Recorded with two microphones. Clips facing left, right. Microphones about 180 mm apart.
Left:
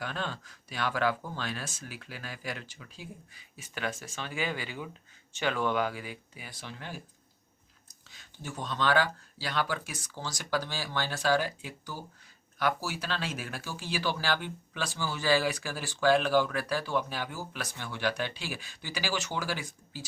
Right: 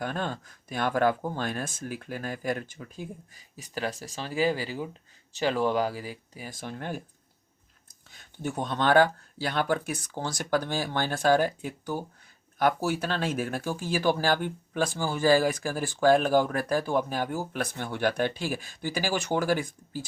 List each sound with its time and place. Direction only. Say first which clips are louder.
0.0 s speech: right 5 dB; 50° right (ahead or behind)
8.1 s speech: right 8 dB; 55° right (ahead or behind)